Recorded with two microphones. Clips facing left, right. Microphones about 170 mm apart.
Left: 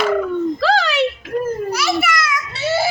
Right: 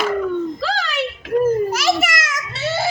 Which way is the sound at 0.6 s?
80° left.